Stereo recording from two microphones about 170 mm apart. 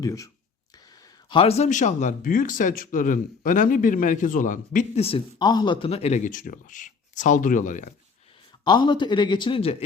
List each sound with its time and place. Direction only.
0.0 s speech: 20° left (ahead or behind)
1.3 s speech: 35° left (ahead or behind); by 4.9 s 50° left (ahead or behind)
4.9 s speech: 35° left (ahead or behind)
8.6 s speech: 25° left (ahead or behind)